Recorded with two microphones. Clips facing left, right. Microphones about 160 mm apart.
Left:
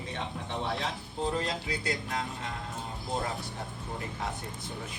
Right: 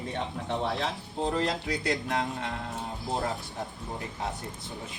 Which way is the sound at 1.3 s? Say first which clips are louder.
Right 4 dB; 70° right (ahead or behind).